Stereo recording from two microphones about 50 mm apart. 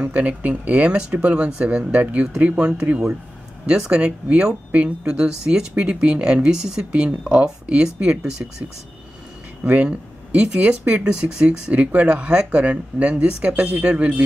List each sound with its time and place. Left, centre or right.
0.0 s speech: right
9.7 s speech: right
11.7 s speech: right